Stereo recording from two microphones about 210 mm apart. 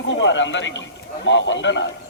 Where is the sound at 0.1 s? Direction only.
60° left (ahead or behind).